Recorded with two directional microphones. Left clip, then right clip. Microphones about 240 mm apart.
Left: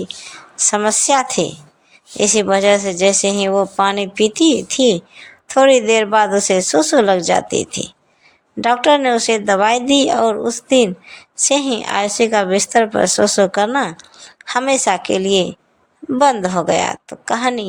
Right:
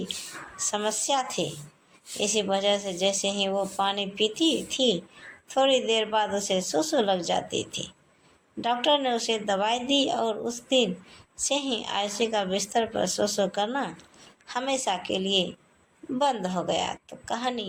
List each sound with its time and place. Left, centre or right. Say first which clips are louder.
0.6 s a woman's voice: left 13 dB; left